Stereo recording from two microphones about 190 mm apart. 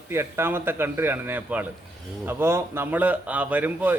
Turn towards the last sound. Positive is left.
turn(degrees=-10)  # may be behind; listen again after turning